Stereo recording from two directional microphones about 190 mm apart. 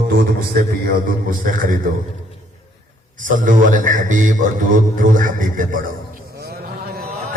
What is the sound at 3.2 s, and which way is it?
A man's voice, 45° right (ahead or behind).